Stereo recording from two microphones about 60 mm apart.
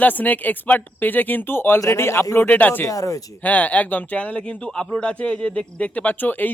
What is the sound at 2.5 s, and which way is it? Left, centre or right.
Speech, left.